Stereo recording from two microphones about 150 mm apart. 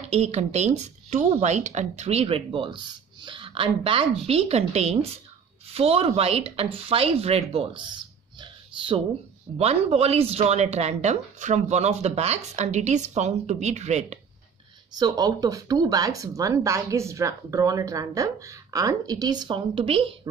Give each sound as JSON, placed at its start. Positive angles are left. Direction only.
{"t": 0.1, "sound": "speech", "side_deg": -45}
{"t": 15.0, "sound": "speech", "side_deg": -25}